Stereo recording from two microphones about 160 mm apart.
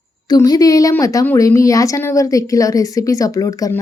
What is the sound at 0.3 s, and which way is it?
A woman's voice, 25° left (ahead or behind).